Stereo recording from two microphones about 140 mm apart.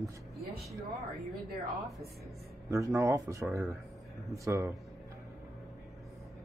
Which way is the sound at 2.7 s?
20° right (ahead or behind).